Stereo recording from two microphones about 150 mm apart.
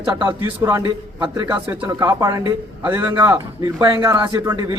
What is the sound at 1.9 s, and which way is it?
Speech, 25° right (ahead or behind).